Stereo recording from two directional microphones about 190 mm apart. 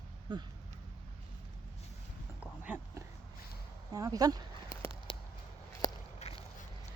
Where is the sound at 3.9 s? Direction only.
20° right (ahead or behind).